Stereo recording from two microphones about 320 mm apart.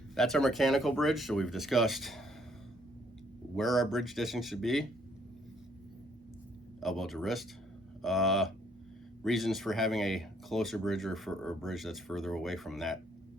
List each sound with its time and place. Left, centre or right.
0.2 s speech: centre
3.5 s speech: centre
6.7 s speech: centre